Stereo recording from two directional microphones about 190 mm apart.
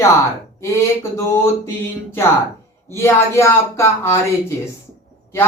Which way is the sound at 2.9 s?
15° left (ahead or behind).